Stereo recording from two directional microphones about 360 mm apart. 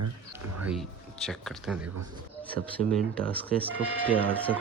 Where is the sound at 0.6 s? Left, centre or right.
Centre.